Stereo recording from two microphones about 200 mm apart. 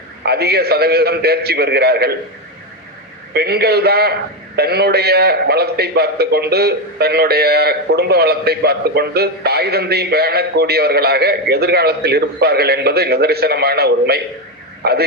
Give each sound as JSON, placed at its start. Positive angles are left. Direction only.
{"t": 0.2, "sound": "a man's voice", "side_deg": -55}
{"t": 3.3, "sound": "a man's voice", "side_deg": -55}